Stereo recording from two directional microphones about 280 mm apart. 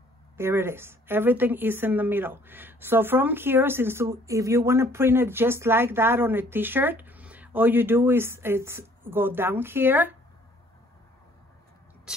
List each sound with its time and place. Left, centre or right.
0.4 s speech: centre